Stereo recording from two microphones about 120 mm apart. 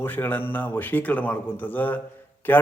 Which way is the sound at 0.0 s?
15° left (ahead or behind).